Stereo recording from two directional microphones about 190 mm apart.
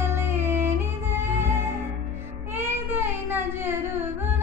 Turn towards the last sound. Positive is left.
turn(degrees=-10)  # may be behind; listen again after turning